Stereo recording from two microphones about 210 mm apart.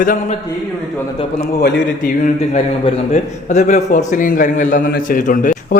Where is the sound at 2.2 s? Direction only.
35° left (ahead or behind).